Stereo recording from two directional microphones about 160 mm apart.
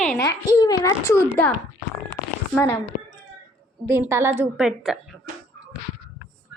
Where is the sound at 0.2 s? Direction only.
20° left (ahead or behind).